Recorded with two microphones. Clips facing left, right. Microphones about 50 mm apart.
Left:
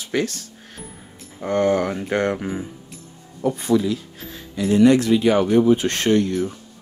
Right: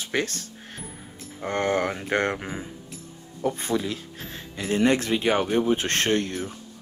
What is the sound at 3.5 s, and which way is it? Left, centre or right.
Speech, right.